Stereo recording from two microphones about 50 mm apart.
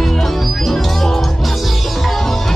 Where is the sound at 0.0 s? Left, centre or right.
Centre.